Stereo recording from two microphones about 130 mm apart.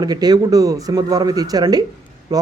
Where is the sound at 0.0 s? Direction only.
30° right (ahead or behind).